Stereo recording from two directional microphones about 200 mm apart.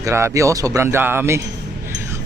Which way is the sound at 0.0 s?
15° right (ahead or behind).